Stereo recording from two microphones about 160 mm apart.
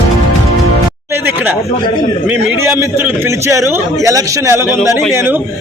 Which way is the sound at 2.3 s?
15° right (ahead or behind).